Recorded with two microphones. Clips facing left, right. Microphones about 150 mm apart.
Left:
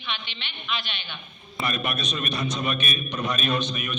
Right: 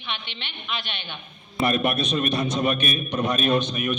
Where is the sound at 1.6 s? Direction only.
55° right (ahead or behind).